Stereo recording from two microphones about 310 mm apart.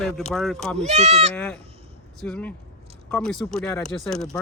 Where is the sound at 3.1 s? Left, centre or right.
Centre.